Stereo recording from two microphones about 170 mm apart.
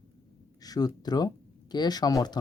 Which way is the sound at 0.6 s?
20° left (ahead or behind).